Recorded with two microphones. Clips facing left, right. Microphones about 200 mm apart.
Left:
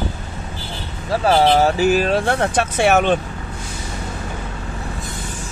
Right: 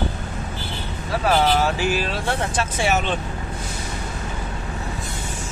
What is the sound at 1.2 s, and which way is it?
Speech, 35° left (ahead or behind).